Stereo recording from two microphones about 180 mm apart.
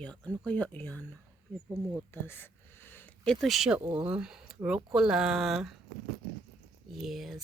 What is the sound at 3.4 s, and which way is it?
Speech, centre (ahead or behind).